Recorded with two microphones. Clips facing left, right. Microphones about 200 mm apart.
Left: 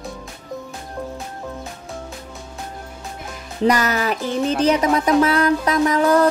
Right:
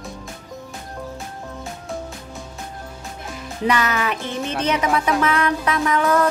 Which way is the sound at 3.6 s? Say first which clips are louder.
Left 3 dB; 40° left (ahead or behind).